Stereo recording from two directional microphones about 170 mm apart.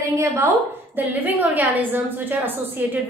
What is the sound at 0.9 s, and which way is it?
A woman's voice, 10° right (ahead or behind).